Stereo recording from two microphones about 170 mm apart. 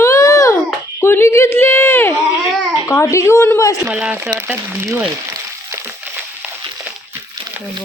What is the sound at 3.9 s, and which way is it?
Speech, 10° right (ahead or behind).